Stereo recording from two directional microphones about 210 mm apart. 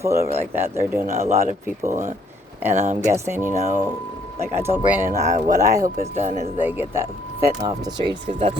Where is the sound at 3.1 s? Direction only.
10° right (ahead or behind).